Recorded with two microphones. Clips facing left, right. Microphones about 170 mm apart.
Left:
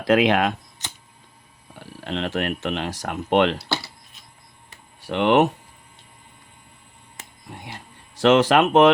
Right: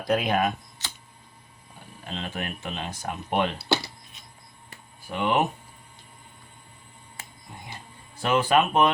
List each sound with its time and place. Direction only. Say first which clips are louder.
0.0 s speech: left 6 dB; 90° left
1.8 s speech: left 8 dB; 75° left (ahead or behind)
3.7 s a sound: right 2 dB; 15° right (ahead or behind)
4.9 s speech: left 7 dB; 80° left
7.5 s speech: left 4 dB; 75° left (ahead or behind)